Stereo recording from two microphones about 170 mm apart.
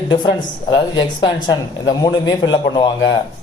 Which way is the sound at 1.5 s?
25° left (ahead or behind).